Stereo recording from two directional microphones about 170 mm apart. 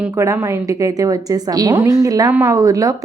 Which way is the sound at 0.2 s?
20° right (ahead or behind).